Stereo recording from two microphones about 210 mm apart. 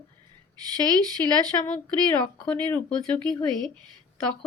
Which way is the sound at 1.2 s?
10° left (ahead or behind).